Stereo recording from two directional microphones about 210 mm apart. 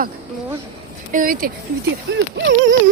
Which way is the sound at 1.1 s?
40° right (ahead or behind).